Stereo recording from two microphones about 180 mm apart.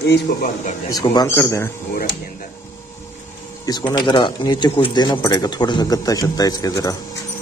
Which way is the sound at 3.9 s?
25° left (ahead or behind).